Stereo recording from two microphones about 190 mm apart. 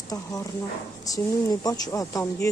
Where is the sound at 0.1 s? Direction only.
20° left (ahead or behind).